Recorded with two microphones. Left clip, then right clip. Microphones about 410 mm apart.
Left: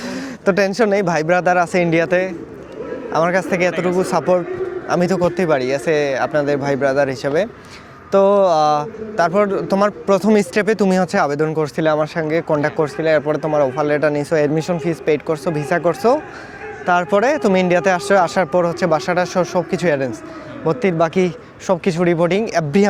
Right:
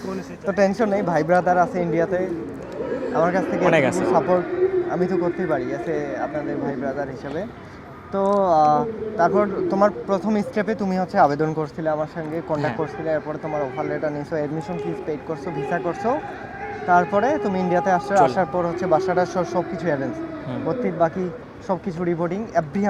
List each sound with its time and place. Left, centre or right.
0.4 s a man's voice: left
3.7 s speech: right
4.0 s speech: left
19.7 s speech: left